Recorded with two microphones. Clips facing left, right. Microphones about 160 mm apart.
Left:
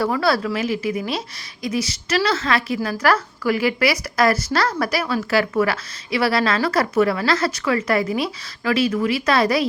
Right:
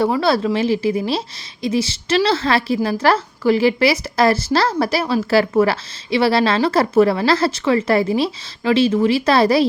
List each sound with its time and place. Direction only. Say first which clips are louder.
0.0 s a woman's voice: right 3 dB; 25° right (ahead or behind)